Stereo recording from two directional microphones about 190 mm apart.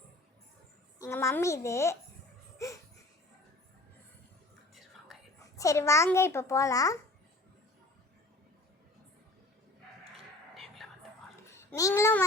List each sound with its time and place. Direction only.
0.9 s a child's voice: 15° left (ahead or behind)
5.4 s a child's voice: 15° left (ahead or behind)
10.5 s music: centre (ahead or behind)
11.4 s babbling: 15° left (ahead or behind)